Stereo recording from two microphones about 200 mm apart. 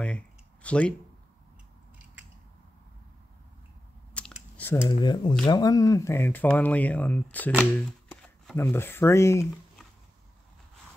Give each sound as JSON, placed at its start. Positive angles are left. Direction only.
{"t": 0.0, "sound": "a sound", "side_deg": 5}
{"t": 4.2, "sound": "chewing", "side_deg": 5}
{"t": 4.6, "sound": "speech", "side_deg": 10}
{"t": 4.9, "sound": "speech", "side_deg": 20}